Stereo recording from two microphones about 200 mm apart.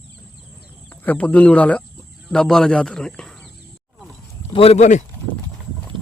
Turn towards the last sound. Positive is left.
turn(degrees=35)  # may be behind; listen again after turning